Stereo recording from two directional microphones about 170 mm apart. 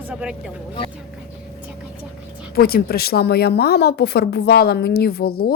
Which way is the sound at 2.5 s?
65° left (ahead or behind).